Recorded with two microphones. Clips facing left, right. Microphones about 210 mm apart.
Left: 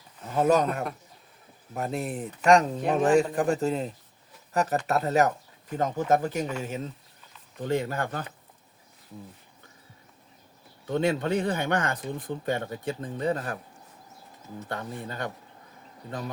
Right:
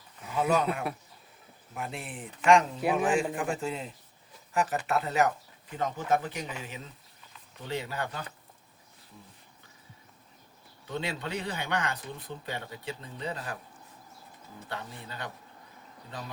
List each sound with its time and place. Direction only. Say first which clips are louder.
0.3 s speech: left 5 dB; 40° left (ahead or behind)
10.8 s speech: left 9 dB; 50° left (ahead or behind)
14.7 s speech: left 6 dB; 50° left (ahead or behind)